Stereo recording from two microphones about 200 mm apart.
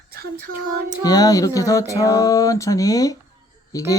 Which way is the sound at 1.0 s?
20° left (ahead or behind).